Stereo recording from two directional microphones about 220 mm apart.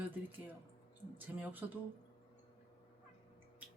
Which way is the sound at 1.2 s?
10° right (ahead or behind).